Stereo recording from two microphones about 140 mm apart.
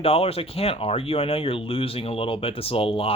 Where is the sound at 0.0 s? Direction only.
45° left (ahead or behind).